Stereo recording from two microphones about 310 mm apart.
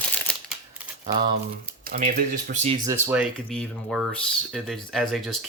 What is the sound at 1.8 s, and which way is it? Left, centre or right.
Speech, right.